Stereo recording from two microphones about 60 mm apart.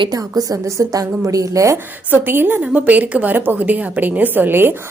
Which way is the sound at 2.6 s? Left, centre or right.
Right.